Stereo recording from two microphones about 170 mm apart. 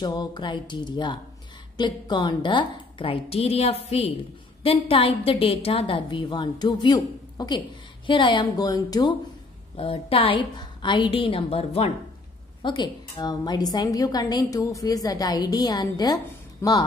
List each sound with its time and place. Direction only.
0.0 s a woman's voice: 25° left (ahead or behind)
9.8 s a woman's voice: 35° left (ahead or behind)